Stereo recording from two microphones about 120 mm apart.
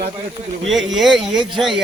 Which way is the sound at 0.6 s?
Centre (ahead or behind).